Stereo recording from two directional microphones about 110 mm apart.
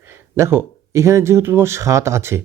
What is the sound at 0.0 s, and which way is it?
Speech, 25° right (ahead or behind).